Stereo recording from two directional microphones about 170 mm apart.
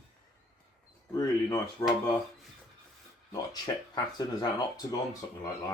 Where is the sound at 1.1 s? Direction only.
20° left (ahead or behind).